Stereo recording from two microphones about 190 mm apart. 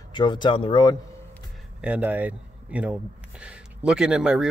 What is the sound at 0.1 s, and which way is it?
Speech, 25° left (ahead or behind).